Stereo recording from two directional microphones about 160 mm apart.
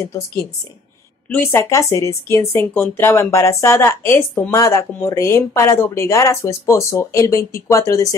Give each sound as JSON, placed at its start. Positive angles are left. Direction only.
{"t": 1.3, "sound": "speech", "side_deg": 15}